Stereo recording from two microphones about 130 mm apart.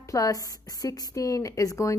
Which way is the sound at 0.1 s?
25° left (ahead or behind).